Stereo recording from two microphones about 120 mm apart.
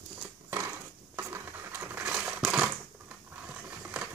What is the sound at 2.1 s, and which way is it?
Crumpling, 5° right (ahead or behind).